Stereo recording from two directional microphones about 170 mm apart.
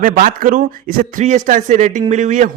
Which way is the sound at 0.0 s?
55° right (ahead or behind).